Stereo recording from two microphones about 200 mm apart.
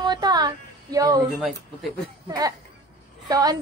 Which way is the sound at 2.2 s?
20° right (ahead or behind).